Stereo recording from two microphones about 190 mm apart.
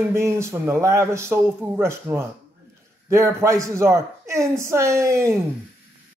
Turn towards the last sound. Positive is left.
turn(degrees=-15)  # may be behind; listen again after turning